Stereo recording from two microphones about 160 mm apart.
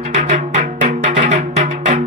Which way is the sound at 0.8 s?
45° right (ahead or behind).